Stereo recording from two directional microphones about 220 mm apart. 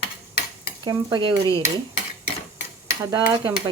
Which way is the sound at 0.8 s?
20° right (ahead or behind).